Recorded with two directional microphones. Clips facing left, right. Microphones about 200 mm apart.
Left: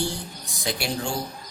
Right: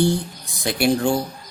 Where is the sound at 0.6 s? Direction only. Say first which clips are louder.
Right 9 dB; 55° right (ahead or behind).